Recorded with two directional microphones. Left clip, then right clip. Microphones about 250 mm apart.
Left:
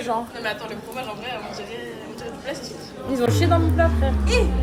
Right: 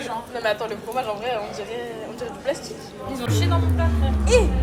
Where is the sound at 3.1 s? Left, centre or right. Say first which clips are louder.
Left 6 dB; left.